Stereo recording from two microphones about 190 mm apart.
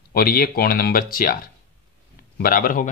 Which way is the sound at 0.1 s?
50° left (ahead or behind).